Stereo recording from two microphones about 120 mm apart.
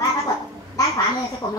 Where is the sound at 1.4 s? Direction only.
45° left (ahead or behind).